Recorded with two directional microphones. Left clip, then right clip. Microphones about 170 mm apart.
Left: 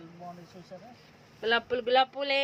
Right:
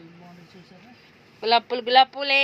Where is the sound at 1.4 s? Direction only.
15° right (ahead or behind).